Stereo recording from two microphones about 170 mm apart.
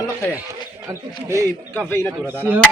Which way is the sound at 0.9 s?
15° right (ahead or behind).